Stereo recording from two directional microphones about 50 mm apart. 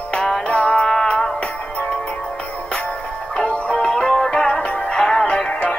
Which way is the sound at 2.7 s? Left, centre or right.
Left.